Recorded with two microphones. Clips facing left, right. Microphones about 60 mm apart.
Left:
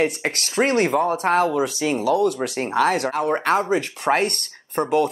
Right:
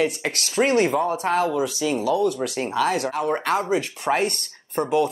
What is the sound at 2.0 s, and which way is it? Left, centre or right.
Speech, left.